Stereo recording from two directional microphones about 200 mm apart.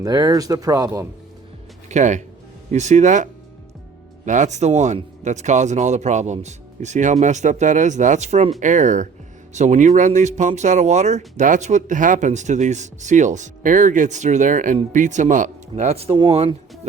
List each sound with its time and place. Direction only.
0.0 s speech: 20° right (ahead or behind)
1.9 s speech: 35° right (ahead or behind)
4.3 s speech: 35° right (ahead or behind)